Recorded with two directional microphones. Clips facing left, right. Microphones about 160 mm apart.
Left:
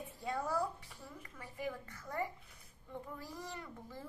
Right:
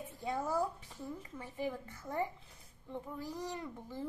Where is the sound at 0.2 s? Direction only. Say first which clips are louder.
Right 2 dB; 20° right (ahead or behind).